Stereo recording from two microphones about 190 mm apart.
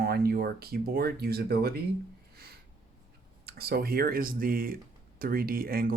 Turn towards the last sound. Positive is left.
turn(degrees=-50)  # may be behind; listen again after turning